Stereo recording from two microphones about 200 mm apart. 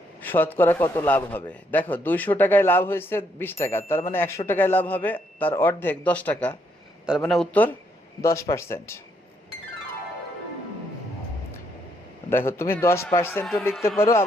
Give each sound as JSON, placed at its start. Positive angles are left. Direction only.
{"t": 0.2, "sound": "a man's voice", "side_deg": 10}
{"t": 8.2, "sound": "a man's voice", "side_deg": 15}
{"t": 12.3, "sound": "a man's voice", "side_deg": 10}
{"t": 13.4, "sound": "a man's voice", "side_deg": 0}
{"t": 13.8, "sound": "a man's voice", "side_deg": 15}